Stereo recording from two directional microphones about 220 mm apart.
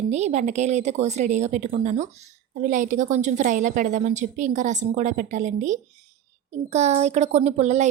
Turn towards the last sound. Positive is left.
turn(degrees=-30)  # may be behind; listen again after turning